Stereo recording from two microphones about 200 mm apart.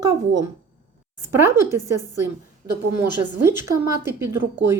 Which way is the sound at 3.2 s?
10° right (ahead or behind).